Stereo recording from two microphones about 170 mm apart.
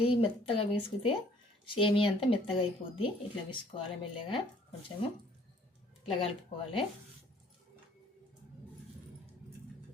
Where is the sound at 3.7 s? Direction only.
30° left (ahead or behind).